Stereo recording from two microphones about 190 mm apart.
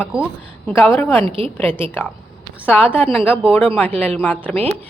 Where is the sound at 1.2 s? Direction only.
25° right (ahead or behind).